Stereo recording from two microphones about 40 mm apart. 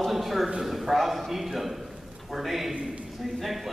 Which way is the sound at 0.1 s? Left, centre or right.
Centre.